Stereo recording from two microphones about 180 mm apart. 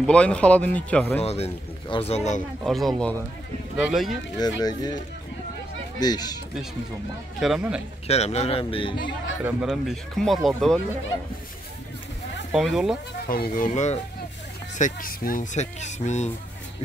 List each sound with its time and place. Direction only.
0.0 s speech: 5° left (ahead or behind)
1.2 s speech: 35° left (ahead or behind)
2.6 s speech: centre (ahead or behind)
4.4 s speech: 20° left (ahead or behind)
5.9 s speech: 20° left (ahead or behind)
7.3 s speech: centre (ahead or behind)
8.1 s speech: 35° left (ahead or behind)
9.4 s speech: 5° right (ahead or behind)
12.5 s speech: centre (ahead or behind)
13.3 s speech: 55° left (ahead or behind)
14.8 s speech: 50° left (ahead or behind)